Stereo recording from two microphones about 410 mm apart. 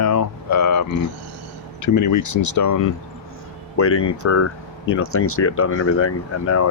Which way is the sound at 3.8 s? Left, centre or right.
Left.